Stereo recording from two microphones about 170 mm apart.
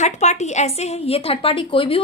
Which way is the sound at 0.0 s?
45° left (ahead or behind).